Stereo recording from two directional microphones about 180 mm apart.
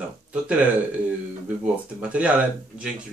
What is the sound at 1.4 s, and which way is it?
Speech, 5° right (ahead or behind).